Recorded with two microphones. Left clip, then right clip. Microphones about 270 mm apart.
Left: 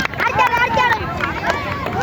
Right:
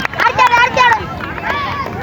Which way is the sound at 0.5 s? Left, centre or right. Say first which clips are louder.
Right 5 dB; right.